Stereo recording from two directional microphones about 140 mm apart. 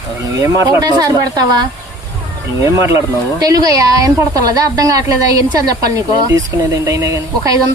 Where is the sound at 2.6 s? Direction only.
25° right (ahead or behind).